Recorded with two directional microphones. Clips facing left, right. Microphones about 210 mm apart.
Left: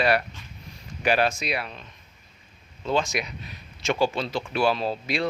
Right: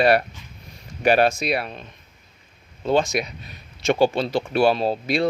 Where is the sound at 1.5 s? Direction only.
40° right (ahead or behind).